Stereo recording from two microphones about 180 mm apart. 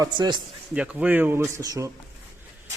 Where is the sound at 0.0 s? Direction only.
25° right (ahead or behind).